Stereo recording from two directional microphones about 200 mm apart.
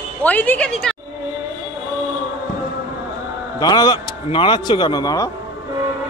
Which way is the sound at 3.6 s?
20° left (ahead or behind).